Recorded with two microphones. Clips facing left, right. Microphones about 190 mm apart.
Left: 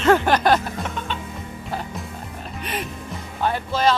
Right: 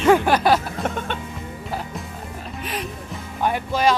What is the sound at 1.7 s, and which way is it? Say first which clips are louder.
Music: even; centre (ahead or behind).